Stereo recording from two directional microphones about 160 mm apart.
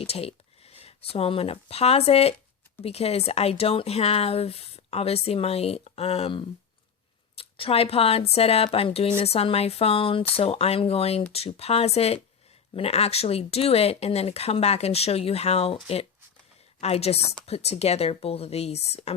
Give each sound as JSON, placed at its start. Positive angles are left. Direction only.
{"t": 0.0, "sound": "speech", "side_deg": 40}